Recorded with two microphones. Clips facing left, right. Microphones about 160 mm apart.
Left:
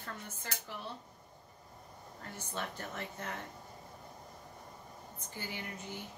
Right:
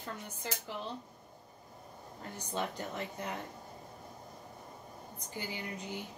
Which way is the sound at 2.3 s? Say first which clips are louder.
Right 4 dB; 15° right (ahead or behind).